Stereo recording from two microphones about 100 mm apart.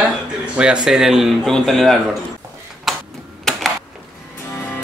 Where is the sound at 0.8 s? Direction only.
5° right (ahead or behind).